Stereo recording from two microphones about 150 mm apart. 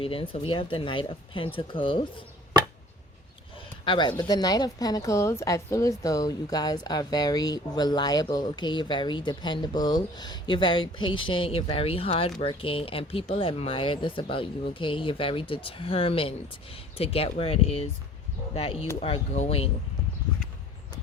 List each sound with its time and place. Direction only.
0.0 s speech: 40° left (ahead or behind)
3.8 s a woman's voice: 30° left (ahead or behind)